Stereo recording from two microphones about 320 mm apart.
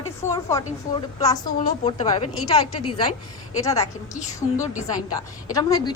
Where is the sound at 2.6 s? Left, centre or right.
Left.